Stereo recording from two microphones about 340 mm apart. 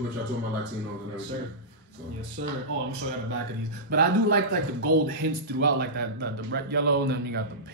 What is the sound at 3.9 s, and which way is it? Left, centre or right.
Speech, right.